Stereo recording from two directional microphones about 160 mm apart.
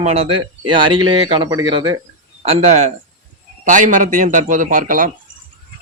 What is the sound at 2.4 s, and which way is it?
A man's voice, 45° right (ahead or behind).